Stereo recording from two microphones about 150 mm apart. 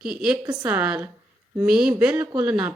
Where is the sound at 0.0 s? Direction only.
5° right (ahead or behind).